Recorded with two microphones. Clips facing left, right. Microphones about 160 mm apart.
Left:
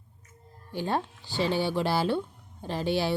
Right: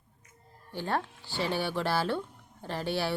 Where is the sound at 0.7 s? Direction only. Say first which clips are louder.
Left 2 dB; 15° left (ahead or behind).